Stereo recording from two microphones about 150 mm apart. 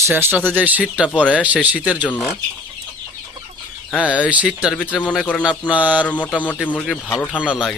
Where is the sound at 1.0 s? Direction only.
10° left (ahead or behind).